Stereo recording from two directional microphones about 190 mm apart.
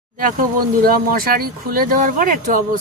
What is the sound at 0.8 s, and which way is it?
Speech, 50° right (ahead or behind).